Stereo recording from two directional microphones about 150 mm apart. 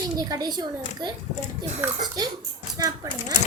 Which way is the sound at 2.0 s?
25° right (ahead or behind).